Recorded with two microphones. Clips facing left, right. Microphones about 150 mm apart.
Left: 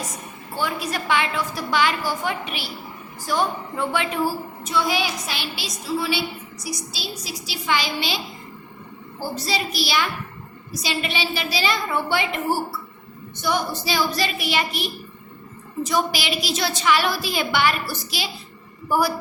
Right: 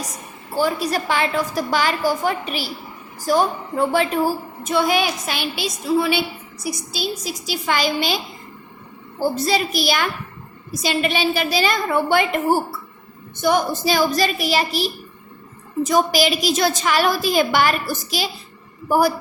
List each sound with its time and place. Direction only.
0.5 s a woman's voice: 35° right (ahead or behind)
9.3 s a woman's voice: 50° right (ahead or behind)